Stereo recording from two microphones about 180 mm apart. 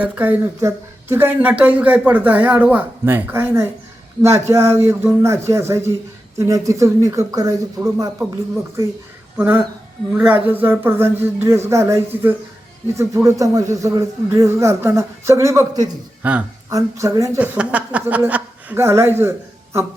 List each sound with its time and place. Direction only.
0.0 s speech: 10° right (ahead or behind)
10.1 s speech: 10° right (ahead or behind)
16.2 s speech: 10° right (ahead or behind)
16.7 s speech: 20° right (ahead or behind)